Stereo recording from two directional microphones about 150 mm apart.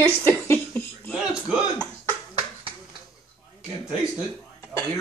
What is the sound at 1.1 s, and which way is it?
Speech, 5° right (ahead or behind).